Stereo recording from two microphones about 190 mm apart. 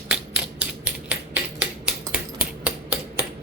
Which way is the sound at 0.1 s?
5° right (ahead or behind).